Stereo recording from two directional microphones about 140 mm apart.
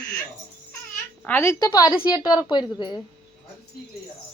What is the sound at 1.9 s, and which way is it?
Speech, 10° right (ahead or behind).